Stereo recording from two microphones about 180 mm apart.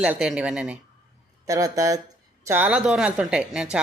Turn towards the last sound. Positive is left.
turn(degrees=-5)  # may be behind; listen again after turning